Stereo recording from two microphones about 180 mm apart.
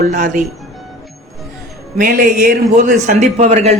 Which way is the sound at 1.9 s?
50° right (ahead or behind).